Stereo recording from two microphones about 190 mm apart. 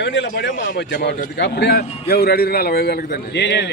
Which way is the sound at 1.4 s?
65° left (ahead or behind).